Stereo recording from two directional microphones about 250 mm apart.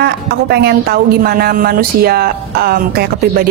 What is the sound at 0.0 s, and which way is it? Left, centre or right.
Speech, right.